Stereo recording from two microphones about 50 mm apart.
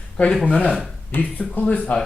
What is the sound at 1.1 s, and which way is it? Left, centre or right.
Speech, left.